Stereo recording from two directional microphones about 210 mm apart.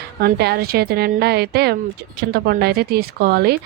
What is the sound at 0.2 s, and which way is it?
A woman's voice, 50° right (ahead or behind).